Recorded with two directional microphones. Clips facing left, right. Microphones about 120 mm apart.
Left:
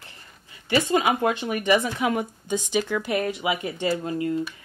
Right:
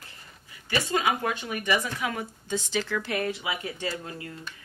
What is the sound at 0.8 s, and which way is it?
Speech, 20° left (ahead or behind).